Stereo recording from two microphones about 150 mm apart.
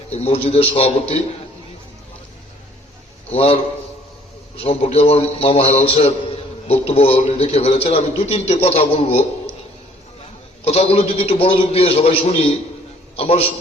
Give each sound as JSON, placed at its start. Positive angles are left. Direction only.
{"t": 0.1, "sound": "a man's voice", "side_deg": 45}
{"t": 3.3, "sound": "a man's voice", "side_deg": 40}
{"t": 10.6, "sound": "a man's voice", "side_deg": 40}